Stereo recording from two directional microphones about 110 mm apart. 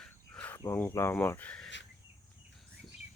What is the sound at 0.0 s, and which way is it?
Cricket, 10° left (ahead or behind).